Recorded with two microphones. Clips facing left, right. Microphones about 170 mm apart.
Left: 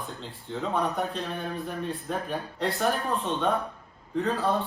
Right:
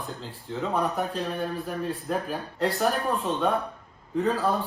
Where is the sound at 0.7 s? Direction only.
Centre (ahead or behind).